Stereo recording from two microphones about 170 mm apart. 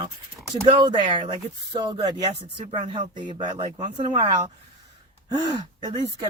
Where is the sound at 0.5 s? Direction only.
25° right (ahead or behind).